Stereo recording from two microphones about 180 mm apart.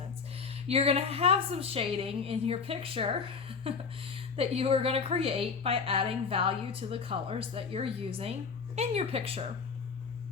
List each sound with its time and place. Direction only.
0.4 s a woman's voice: 35° right (ahead or behind)